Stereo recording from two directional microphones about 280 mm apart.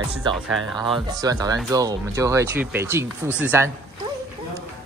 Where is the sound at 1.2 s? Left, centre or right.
Centre.